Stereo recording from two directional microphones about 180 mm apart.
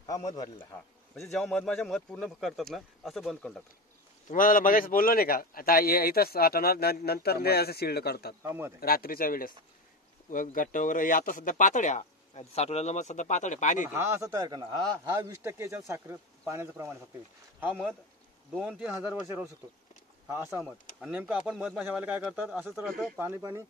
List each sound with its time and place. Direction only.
0.3 s a man's voice: 20° left (ahead or behind)
1.1 s speech: centre (ahead or behind)
4.3 s a man's voice: 50° left (ahead or behind)
8.4 s a man's voice: 15° right (ahead or behind)
8.8 s a man's voice: 55° left (ahead or behind)
13.9 s a man's voice: 15° right (ahead or behind)
20.2 s a man's voice: 15° right (ahead or behind)
22.8 s speech: centre (ahead or behind)
23.1 s a man's voice: 15° right (ahead or behind)